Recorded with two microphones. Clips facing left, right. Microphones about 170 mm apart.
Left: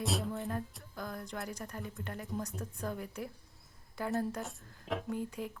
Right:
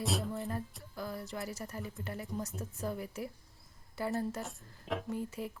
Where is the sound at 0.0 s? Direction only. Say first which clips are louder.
Even; centre (ahead or behind).